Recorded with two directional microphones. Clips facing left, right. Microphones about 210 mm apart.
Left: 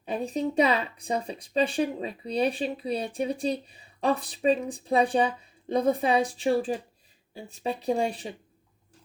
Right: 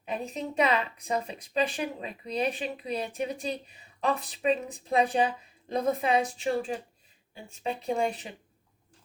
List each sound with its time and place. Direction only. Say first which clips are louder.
0.0 s speech: left 5 dB; 35° left (ahead or behind)